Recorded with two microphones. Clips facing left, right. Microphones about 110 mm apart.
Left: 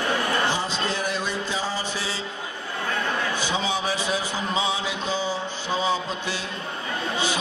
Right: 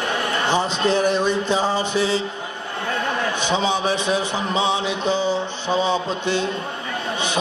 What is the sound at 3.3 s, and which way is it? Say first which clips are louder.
A man's voice: right 5 dB; 20° right (ahead or behind).